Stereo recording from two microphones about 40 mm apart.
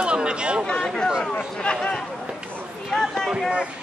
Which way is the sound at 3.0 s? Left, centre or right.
Centre.